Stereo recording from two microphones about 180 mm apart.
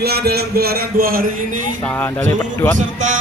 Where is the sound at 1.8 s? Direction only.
10° left (ahead or behind).